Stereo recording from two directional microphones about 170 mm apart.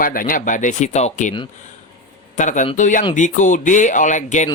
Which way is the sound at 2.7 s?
50° left (ahead or behind).